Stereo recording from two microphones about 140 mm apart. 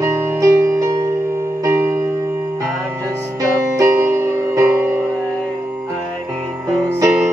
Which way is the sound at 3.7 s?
20° right (ahead or behind).